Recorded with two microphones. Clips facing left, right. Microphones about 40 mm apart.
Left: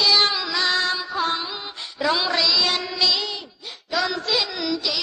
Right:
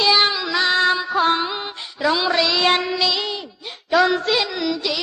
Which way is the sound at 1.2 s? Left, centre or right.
Right.